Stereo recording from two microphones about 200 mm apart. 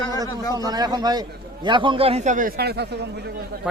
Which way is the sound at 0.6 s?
20° right (ahead or behind).